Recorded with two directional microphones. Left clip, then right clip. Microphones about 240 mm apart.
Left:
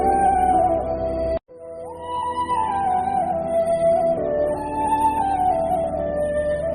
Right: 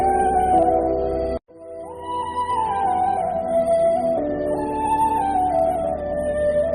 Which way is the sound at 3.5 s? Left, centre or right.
Centre.